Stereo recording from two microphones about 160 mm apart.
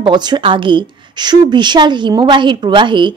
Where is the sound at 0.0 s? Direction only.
25° right (ahead or behind).